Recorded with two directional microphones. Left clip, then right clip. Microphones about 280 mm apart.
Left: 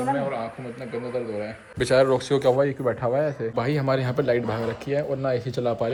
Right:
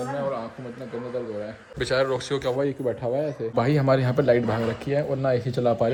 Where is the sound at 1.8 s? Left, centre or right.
Centre.